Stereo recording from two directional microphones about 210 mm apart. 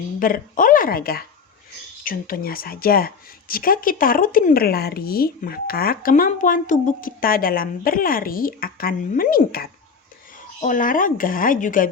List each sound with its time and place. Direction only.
0.2 s speech: 40° left (ahead or behind)